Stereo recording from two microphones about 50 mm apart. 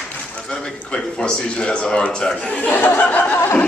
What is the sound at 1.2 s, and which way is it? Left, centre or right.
Speech, centre.